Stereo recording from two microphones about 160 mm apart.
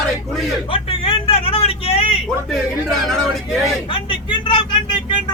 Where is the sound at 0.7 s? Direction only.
35° left (ahead or behind).